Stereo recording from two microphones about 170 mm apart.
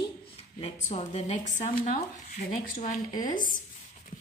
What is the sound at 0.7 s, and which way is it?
A woman's voice, 40° left (ahead or behind).